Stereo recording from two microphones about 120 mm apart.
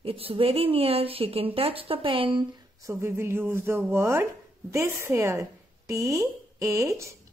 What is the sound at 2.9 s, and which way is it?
A woman's voice, 20° right (ahead or behind).